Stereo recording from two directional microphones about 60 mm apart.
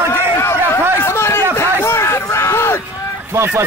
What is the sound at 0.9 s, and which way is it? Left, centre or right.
Speech, left.